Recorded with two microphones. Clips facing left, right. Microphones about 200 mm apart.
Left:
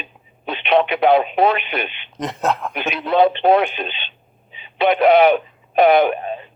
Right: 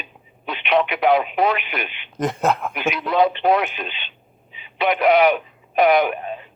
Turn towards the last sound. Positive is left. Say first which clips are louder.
# left 3 dB
turn(degrees=30)  # may be behind; listen again after turning